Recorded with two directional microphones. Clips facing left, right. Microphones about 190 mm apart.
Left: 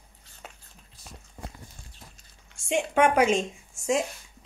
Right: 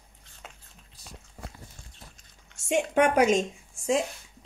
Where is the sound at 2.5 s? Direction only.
45° right (ahead or behind).